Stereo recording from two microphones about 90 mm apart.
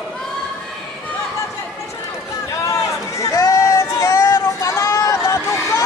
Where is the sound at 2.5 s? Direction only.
40° left (ahead or behind).